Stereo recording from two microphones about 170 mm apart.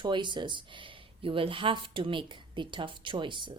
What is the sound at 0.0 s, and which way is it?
Speech, 25° right (ahead or behind).